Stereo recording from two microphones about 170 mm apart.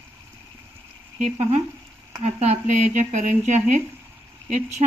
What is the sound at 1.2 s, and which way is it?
Speech, 40° right (ahead or behind).